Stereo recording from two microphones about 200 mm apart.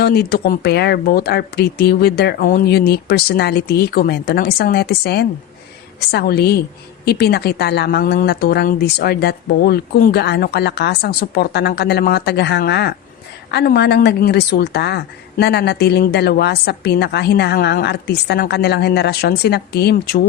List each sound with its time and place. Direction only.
0.0 s a woman's voice: 50° left (ahead or behind)